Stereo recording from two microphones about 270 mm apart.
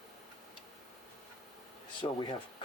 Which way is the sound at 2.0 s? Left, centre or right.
Centre.